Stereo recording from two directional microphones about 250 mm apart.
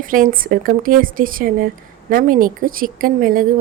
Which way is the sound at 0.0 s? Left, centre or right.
Right.